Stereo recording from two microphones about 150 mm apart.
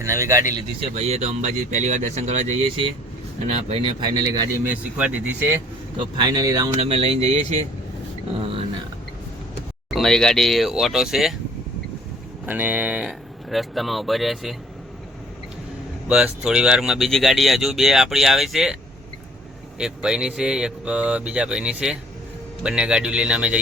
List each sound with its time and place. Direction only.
0.0 s speech: 20° right (ahead or behind)
0.8 s speech: 45° right (ahead or behind)
3.4 s speech: 40° right (ahead or behind)
4.2 s speech: 25° right (ahead or behind)
4.6 s speech: 10° right (ahead or behind)
6.0 s speech: 30° right (ahead or behind)
6.8 s speech: 40° right (ahead or behind)
9.9 s speech: 5° left (ahead or behind)
12.5 s speech: 10° right (ahead or behind)
16.0 s speech: 10° right (ahead or behind)
19.8 s speech: 5° right (ahead or behind)